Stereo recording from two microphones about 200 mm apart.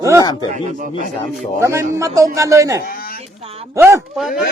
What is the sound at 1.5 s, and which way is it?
A man's voice, 15° right (ahead or behind).